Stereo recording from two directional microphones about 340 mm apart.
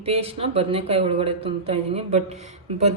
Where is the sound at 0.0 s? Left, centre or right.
Centre.